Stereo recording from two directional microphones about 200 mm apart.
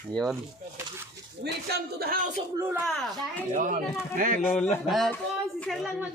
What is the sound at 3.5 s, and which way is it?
Speech, 40° right (ahead or behind).